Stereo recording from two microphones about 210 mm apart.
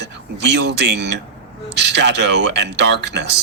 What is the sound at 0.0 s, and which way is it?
Speech, 55° right (ahead or behind).